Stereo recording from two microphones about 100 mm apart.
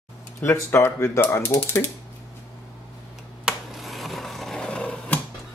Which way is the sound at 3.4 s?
Centre (ahead or behind).